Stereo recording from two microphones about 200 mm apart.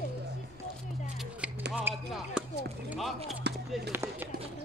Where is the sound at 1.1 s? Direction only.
Centre (ahead or behind).